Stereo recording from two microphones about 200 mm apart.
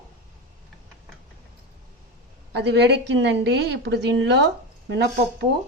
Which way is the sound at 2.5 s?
55° right (ahead or behind).